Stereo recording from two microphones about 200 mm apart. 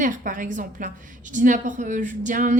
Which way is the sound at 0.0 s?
40° right (ahead or behind).